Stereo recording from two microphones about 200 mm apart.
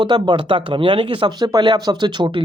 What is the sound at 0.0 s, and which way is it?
Speech, 20° right (ahead or behind).